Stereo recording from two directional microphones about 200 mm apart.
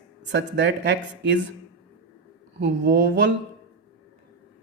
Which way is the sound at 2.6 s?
60° right (ahead or behind).